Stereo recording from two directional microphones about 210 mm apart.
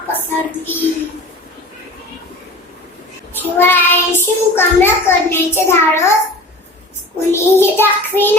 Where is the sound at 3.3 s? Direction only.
10° left (ahead or behind).